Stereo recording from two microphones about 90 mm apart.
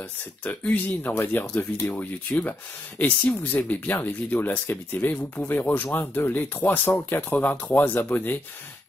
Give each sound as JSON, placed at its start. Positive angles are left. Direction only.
{"t": 0.4, "sound": "speech", "side_deg": 15}